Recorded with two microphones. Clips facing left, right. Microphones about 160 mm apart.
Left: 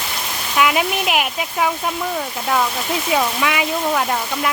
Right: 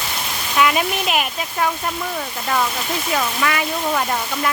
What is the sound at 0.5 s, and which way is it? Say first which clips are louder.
Speech: even; 5° left (ahead or behind).